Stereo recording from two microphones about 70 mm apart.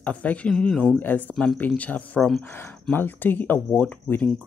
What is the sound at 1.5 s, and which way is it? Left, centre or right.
Speech, left.